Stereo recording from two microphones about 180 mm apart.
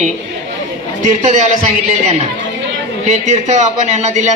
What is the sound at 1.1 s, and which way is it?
Speech, 40° right (ahead or behind).